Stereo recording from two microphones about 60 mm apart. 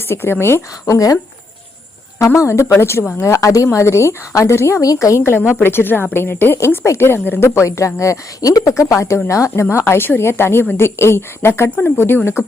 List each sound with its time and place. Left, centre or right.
0.1 s a woman's voice: left
0.9 s a woman's voice: left
2.7 s a woman's voice: left
3.2 s a woman's voice: left
4.5 s a woman's voice: left
4.8 s a woman's voice: left
5.4 s a woman's voice: left
8.7 s a woman's voice: left